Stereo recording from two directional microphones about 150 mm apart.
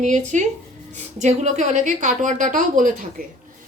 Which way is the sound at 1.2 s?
50° right (ahead or behind).